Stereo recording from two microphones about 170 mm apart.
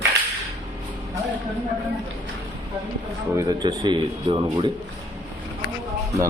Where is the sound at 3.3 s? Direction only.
25° right (ahead or behind).